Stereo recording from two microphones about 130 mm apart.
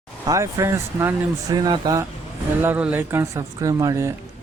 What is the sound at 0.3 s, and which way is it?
Speech, 25° right (ahead or behind).